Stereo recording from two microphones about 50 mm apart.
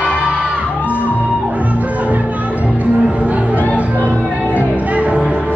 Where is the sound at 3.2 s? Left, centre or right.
Right.